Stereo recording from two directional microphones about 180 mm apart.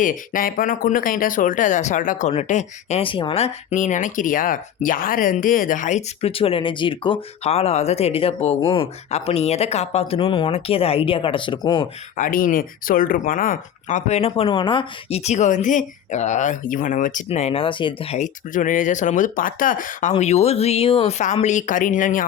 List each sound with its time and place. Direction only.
0.0 s speech: 50° left (ahead or behind); by 11.9 s 25° left (ahead or behind)
12.1 s speech: 50° left (ahead or behind)
17.2 s speech: 35° left (ahead or behind)